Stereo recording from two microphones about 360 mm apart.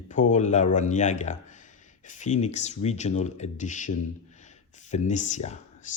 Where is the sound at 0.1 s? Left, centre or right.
Left.